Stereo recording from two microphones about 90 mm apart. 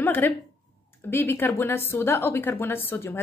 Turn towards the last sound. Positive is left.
turn(degrees=25)  # may be behind; listen again after turning